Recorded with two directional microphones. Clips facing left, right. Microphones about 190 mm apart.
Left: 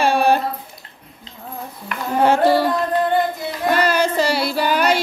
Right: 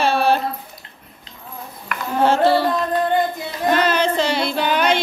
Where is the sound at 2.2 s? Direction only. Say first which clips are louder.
Left 1 dB; 15° left (ahead or behind).